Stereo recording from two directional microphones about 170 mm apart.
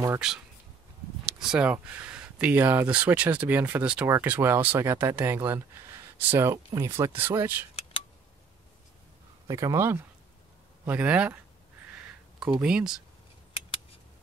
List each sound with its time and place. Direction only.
0.2 s speech: 5° right (ahead or behind)
9.5 s speech: 20° right (ahead or behind)
12.5 s speech: 5° right (ahead or behind)